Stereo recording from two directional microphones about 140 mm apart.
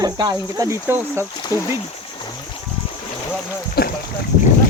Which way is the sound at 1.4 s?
25° left (ahead or behind).